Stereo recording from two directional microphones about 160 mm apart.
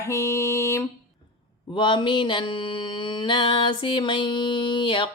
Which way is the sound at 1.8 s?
30° left (ahead or behind).